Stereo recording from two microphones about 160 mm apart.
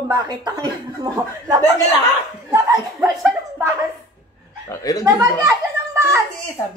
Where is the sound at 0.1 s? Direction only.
25° right (ahead or behind).